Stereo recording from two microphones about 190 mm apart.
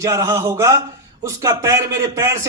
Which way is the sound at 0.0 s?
15° right (ahead or behind).